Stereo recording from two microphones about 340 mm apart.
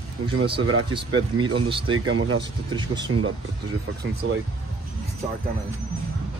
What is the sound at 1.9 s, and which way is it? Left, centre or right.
Speech, right.